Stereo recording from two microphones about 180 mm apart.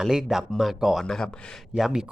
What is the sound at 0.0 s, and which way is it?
Speech, centre (ahead or behind).